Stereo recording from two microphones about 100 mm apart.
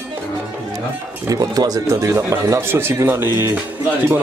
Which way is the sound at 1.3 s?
40° right (ahead or behind).